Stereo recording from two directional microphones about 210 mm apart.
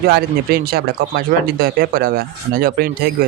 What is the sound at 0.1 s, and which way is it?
Speech, 50° right (ahead or behind).